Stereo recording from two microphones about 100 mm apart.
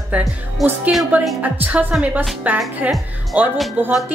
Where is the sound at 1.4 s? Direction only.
15° right (ahead or behind).